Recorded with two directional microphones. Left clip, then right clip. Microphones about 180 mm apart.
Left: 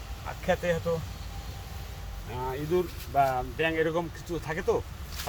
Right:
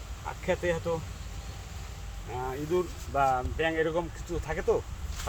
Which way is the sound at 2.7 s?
15° right (ahead or behind).